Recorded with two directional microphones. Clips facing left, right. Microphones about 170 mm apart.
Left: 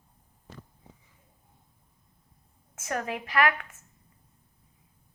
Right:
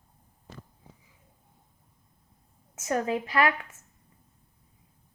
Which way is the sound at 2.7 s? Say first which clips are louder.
Right 5 dB; 25° right (ahead or behind).